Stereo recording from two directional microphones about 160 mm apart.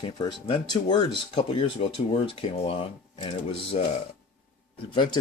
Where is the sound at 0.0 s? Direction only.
25° left (ahead or behind).